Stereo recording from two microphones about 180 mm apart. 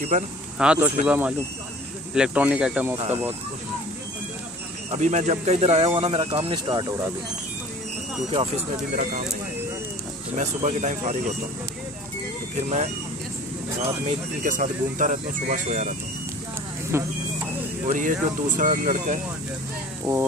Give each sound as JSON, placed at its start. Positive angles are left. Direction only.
{"t": 0.1, "sound": "speech", "side_deg": -45}
{"t": 0.6, "sound": "speech", "side_deg": -5}
{"t": 4.9, "sound": "speech", "side_deg": -40}
{"t": 10.3, "sound": "speech", "side_deg": -40}
{"t": 12.5, "sound": "speech", "side_deg": -40}
{"t": 14.0, "sound": "speech", "side_deg": -45}
{"t": 16.9, "sound": "speech", "side_deg": -15}
{"t": 17.8, "sound": "speech", "side_deg": -45}
{"t": 20.1, "sound": "speech", "side_deg": -15}